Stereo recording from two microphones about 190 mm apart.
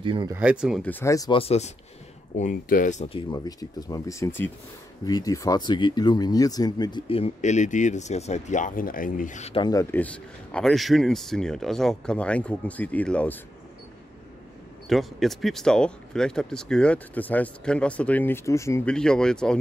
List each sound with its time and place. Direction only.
0.0 s speech: 25° right (ahead or behind)
0.4 s speech: 5° right (ahead or behind)
0.8 s speech: 10° left (ahead or behind)
1.4 s speech: 35° left (ahead or behind); by 13.4 s 5° left (ahead or behind)
14.9 s speech: centre (ahead or behind)